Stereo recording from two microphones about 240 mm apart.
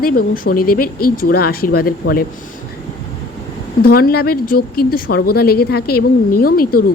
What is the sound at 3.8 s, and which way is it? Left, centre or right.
Speech, left.